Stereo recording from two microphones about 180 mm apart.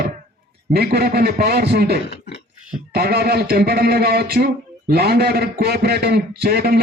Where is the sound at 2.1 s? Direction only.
70° left (ahead or behind).